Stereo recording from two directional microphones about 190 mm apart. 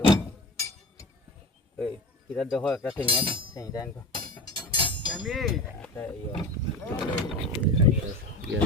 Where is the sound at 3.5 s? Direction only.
20° left (ahead or behind).